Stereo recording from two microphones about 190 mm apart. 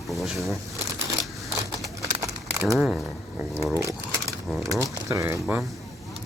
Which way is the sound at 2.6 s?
Centre (ahead or behind).